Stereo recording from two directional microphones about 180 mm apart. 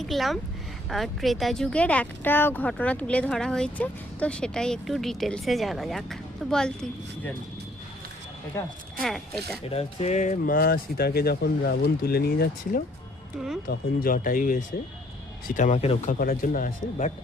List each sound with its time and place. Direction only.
0.0 s speech: centre (ahead or behind)
9.0 s speech: centre (ahead or behind)
9.6 s speech: 35° left (ahead or behind)
16.1 s speech: 50° left (ahead or behind)